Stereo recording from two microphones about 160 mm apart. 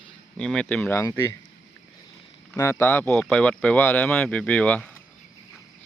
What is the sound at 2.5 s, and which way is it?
Speech, 15° left (ahead or behind).